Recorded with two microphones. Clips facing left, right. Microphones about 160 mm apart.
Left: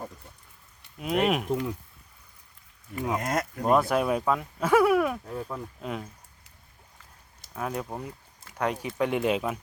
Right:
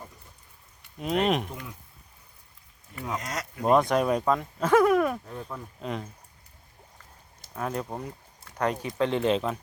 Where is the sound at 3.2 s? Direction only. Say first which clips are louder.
Left 7 dB; 55° left (ahead or behind).